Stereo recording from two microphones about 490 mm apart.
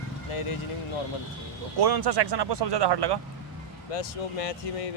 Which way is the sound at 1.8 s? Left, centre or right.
Right.